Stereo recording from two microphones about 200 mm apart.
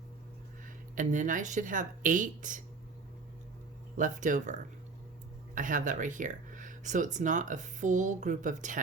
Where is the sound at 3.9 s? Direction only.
40° right (ahead or behind).